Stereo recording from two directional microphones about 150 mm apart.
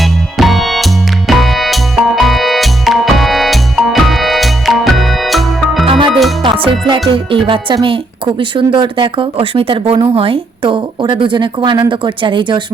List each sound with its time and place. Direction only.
0.0 s music: centre (ahead or behind)
5.8 s music: 35° right (ahead or behind)
6.1 s music: centre (ahead or behind)
6.4 s music: 35° right (ahead or behind)
7.1 s speech: 35° right (ahead or behind)